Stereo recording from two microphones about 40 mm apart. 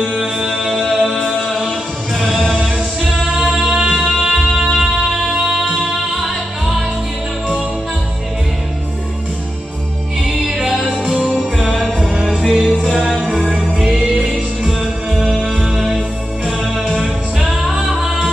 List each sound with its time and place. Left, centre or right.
0.6 s music: centre
3.0 s music: centre
5.1 s music: centre
10.2 s music: centre
12.8 s music: centre
13.5 s music: centre
15.4 s music: centre